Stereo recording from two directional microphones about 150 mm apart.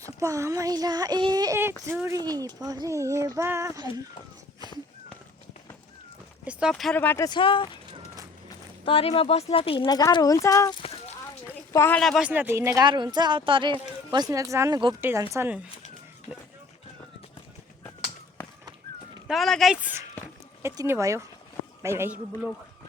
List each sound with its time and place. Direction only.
0.0 s speech: 20° right (ahead or behind)
1.5 s speech: 15° right (ahead or behind)
6.4 s speech: 5° right (ahead or behind)
6.9 s speech: 15° left (ahead or behind)
7.3 s speech: 35° left (ahead or behind)
8.8 s speech: 40° left (ahead or behind); by 10.8 s 20° left (ahead or behind)
11.4 s a sound: 15° left (ahead or behind)
11.9 s speech: centre (ahead or behind)
12.2 s speech: 10° right (ahead or behind)
12.8 s speech: 30° right (ahead or behind); by 15.6 s 15° right (ahead or behind)
19.3 s speech: centre (ahead or behind)
20.2 s a sound: 15° right (ahead or behind)
21.8 s a man's voice: 15° right (ahead or behind)